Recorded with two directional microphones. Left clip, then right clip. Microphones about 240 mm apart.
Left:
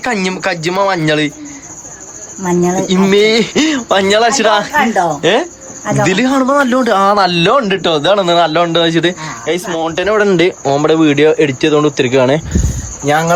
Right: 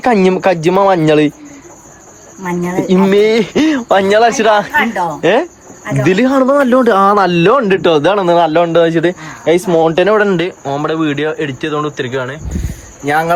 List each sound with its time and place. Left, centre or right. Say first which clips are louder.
0.0 s speech: right 5 dB; centre
2.7 s a man's voice: right 4 dB; centre
9.5 s speech: right 6 dB; right
10.2 s a man's voice: left 2 dB; centre